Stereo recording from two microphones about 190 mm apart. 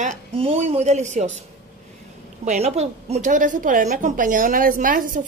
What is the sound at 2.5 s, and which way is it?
A woman's voice, 35° right (ahead or behind).